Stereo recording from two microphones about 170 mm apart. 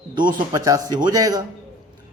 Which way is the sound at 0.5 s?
20° right (ahead or behind).